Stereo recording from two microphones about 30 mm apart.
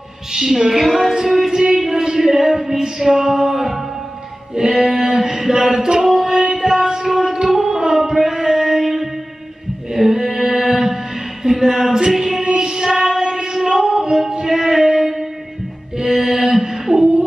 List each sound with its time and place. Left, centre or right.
0.3 s music: centre
0.8 s child singing: centre
1.4 s music: right
5.5 s a sound: right
6.5 s music: centre
8.0 s a sound: centre
9.8 s music: right
11.6 s chant: centre
12.5 s child singing: right
13.8 s music: right
16.5 s a sound: centre